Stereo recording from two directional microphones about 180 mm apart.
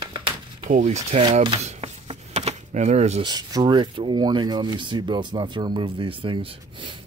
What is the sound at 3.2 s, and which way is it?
Speech, 20° right (ahead or behind).